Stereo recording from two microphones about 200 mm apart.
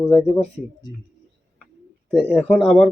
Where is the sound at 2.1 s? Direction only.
5° right (ahead or behind).